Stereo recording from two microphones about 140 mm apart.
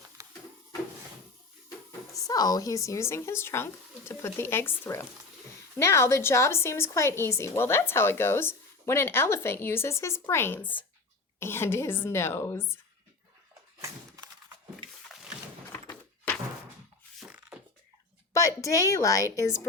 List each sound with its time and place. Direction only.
0.2 s a sound: 20° right (ahead or behind)
2.2 s a woman's voice: 25° left (ahead or behind)
15.7 s thunk: 15° left (ahead or behind)
18.3 s speech: 20° left (ahead or behind)